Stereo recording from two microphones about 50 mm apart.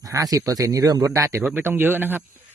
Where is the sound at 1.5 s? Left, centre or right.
Right.